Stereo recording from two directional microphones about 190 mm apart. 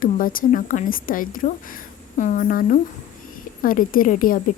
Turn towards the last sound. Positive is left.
turn(degrees=45)  # may be behind; listen again after turning